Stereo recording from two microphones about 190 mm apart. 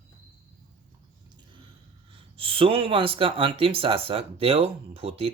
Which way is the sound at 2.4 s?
30° right (ahead or behind).